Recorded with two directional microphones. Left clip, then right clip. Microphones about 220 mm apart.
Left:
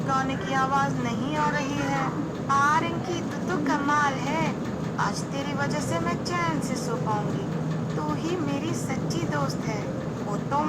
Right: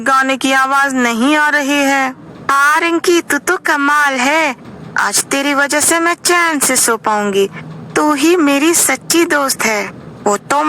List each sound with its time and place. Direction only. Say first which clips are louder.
0.1 s speech: right 15 dB; 50° right (ahead or behind)